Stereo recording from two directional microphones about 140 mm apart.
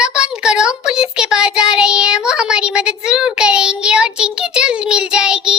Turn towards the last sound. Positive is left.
turn(degrees=-5)  # may be behind; listen again after turning